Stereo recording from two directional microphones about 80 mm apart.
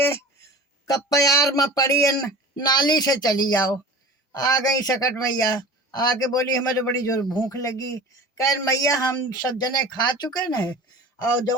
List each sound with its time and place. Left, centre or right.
0.0 s a sound: left
0.9 s a man's voice: left
2.6 s a man's voice: left
7.5 s a man's voice: left